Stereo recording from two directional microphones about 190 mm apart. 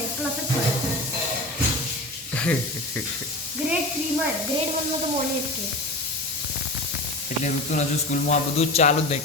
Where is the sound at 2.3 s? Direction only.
5° left (ahead or behind).